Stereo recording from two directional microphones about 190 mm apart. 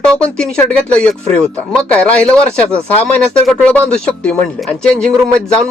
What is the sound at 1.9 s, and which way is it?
Speech, 5° left (ahead or behind).